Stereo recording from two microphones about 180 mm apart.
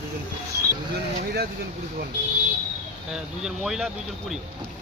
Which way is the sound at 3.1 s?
Centre (ahead or behind).